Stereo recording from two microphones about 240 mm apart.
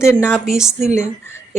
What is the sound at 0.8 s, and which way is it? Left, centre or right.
Speech, right.